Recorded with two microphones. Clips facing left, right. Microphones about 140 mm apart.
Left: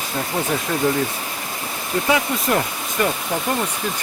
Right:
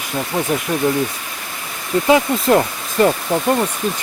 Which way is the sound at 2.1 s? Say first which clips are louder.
Right 7 dB; 25° right (ahead or behind).